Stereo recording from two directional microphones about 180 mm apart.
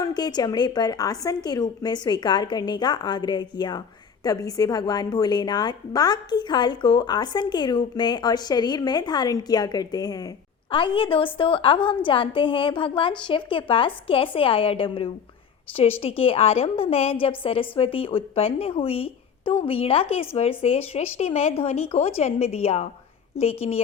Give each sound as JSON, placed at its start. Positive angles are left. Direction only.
{"t": 0.0, "sound": "a woman's voice", "side_deg": 20}